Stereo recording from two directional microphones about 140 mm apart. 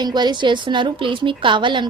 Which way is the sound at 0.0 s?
30° right (ahead or behind).